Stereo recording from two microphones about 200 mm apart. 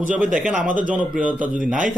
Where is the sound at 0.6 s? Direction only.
40° right (ahead or behind).